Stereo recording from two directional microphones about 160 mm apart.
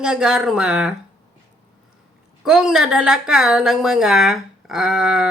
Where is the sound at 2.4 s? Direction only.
5° right (ahead or behind).